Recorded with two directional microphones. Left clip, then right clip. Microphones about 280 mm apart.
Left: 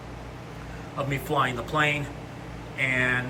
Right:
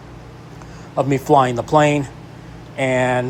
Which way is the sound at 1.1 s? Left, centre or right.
Centre.